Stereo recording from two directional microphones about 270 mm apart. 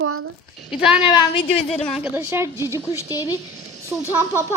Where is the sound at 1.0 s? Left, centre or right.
Centre.